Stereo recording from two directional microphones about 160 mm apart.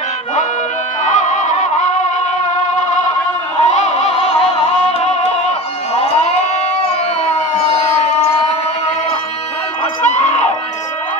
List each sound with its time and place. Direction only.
1.0 s music: 50° left (ahead or behind)
3.6 s music: 45° left (ahead or behind)
8.0 s a sound: 45° left (ahead or behind)
10.0 s screaming: 45° left (ahead or behind)